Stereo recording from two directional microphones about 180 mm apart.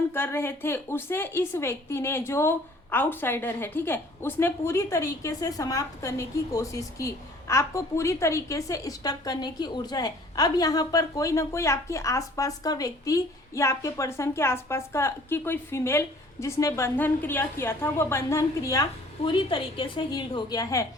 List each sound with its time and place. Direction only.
0.1 s a woman's voice: 15° left (ahead or behind)